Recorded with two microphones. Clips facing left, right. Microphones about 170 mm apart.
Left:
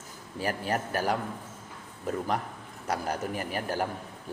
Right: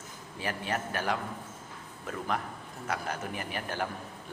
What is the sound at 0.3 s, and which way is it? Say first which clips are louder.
A man's voice: left 4 dB; 40° left (ahead or behind).